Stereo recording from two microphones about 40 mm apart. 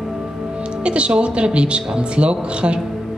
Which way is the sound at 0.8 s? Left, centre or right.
Right.